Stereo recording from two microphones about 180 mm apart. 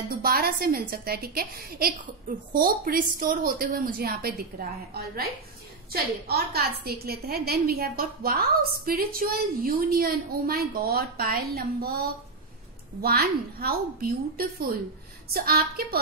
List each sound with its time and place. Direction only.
0.1 s a woman's voice: 55° right (ahead or behind)